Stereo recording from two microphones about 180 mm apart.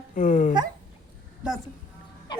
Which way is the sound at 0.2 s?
45° left (ahead or behind).